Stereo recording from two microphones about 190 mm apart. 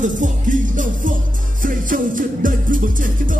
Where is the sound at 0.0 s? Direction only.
45° right (ahead or behind).